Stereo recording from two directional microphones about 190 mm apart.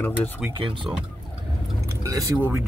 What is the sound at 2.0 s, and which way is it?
Speech, 15° right (ahead or behind).